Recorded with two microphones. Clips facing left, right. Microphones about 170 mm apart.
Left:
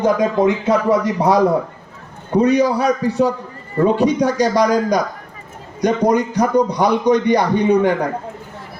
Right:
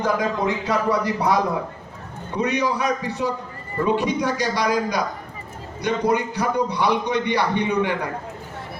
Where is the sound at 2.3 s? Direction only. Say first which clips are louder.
Left 8 dB; 35° left (ahead or behind).